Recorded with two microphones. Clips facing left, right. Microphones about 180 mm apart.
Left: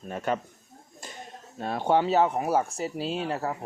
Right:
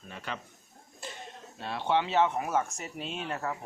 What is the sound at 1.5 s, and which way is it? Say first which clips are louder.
Speech: left 5 dB; 45° left (ahead or behind).